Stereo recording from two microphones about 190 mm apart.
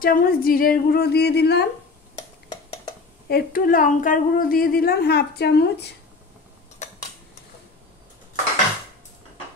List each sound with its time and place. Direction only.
0.0 s a woman's voice: 50° left (ahead or behind)
3.3 s a woman's voice: 50° left (ahead or behind)